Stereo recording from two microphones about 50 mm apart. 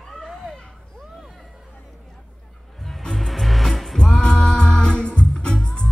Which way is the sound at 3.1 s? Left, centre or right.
Centre.